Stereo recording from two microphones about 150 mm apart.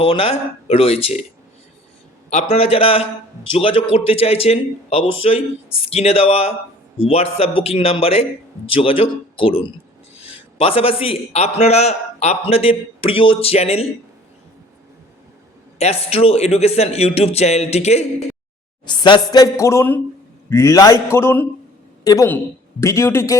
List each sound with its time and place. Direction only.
0.0 s a man's voice: 40° left (ahead or behind)
2.3 s a man's voice: 40° left (ahead or behind)
15.8 s speech: 45° left (ahead or behind)
18.9 s a woman's voice: 30° left (ahead or behind)